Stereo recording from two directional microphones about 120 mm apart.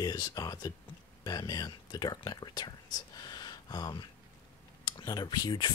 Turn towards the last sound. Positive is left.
turn(degrees=35)  # may be behind; listen again after turning